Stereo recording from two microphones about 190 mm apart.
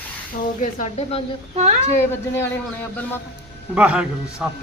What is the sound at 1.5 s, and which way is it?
Speech, 35° right (ahead or behind).